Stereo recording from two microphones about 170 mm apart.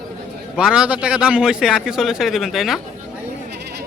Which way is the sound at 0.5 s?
5° right (ahead or behind).